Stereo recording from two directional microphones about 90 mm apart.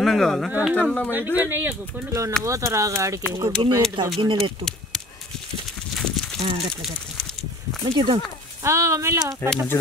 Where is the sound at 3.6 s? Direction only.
60° right (ahead or behind).